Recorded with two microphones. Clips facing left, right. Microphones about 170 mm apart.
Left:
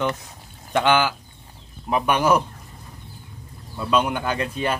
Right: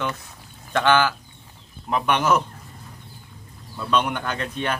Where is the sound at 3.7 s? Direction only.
5° left (ahead or behind).